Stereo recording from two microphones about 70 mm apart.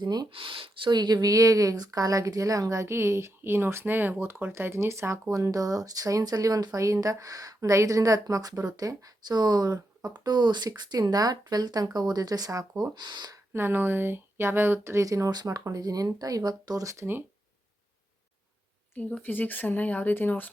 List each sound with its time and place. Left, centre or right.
0.0 s speech: right
0.9 s speech: right
5.3 s speech: right
10.7 s speech: right
13.5 s speech: right
15.0 s speech: right
19.2 s speech: left